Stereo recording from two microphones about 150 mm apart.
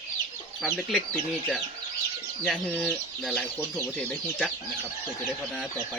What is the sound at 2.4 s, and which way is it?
Speech, centre (ahead or behind).